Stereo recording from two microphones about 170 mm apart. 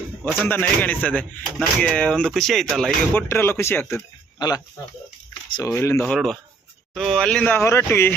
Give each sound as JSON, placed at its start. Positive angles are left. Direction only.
{"t": 0.2, "sound": "a man's voice", "side_deg": -5}
{"t": 0.4, "sound": "speech", "side_deg": 10}
{"t": 3.2, "sound": "speech", "side_deg": 15}
{"t": 5.3, "sound": "a sound", "side_deg": 25}
{"t": 5.7, "sound": "speech", "side_deg": 15}